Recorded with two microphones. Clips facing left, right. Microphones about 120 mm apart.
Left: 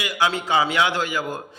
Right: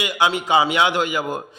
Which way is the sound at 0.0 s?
20° right (ahead or behind).